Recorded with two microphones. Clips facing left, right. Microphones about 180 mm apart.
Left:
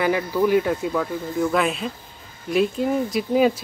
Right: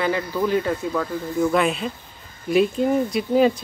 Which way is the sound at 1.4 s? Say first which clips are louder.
Right 2 dB; centre (ahead or behind).